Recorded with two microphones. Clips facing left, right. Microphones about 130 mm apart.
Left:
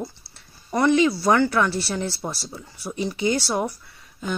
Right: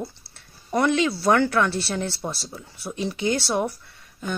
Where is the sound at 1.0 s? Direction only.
5° left (ahead or behind).